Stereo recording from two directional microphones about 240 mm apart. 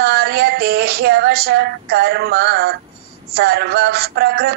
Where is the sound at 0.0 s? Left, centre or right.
Right.